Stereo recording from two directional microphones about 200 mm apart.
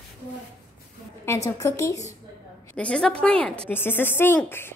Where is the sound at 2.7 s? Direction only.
5° left (ahead or behind).